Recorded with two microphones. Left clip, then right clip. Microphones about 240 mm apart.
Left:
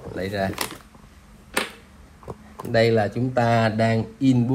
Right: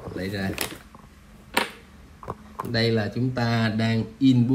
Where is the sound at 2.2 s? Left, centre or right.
Left.